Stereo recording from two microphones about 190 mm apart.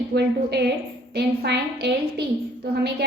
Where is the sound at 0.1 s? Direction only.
60° right (ahead or behind).